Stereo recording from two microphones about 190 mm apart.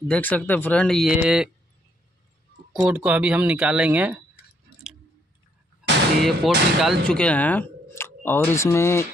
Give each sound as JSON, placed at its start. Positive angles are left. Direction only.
{"t": 0.1, "sound": "speech", "side_deg": 5}
{"t": 2.7, "sound": "speech", "side_deg": -5}
{"t": 5.8, "sound": "a sound", "side_deg": -5}
{"t": 6.2, "sound": "speech", "side_deg": 0}